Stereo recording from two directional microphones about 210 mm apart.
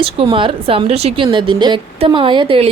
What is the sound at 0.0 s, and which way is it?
A woman's voice, 25° right (ahead or behind).